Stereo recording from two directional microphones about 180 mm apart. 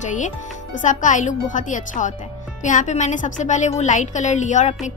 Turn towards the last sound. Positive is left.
turn(degrees=40)  # may be behind; listen again after turning